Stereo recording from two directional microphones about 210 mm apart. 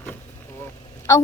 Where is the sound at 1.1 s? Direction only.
15° left (ahead or behind).